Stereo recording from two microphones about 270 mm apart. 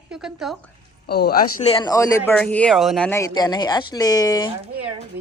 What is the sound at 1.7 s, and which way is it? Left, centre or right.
Speech, centre.